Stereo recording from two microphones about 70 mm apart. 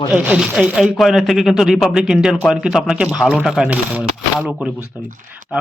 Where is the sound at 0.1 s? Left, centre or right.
Centre.